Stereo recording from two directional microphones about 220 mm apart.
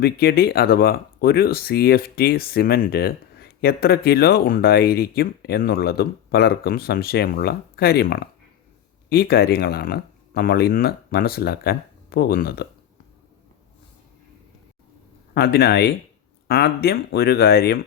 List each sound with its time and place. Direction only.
0.0 s speech: 45° left (ahead or behind)
15.4 s speech: 45° left (ahead or behind)